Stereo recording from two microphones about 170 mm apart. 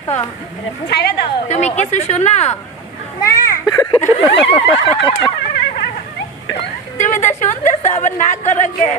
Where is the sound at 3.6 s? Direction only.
25° left (ahead or behind).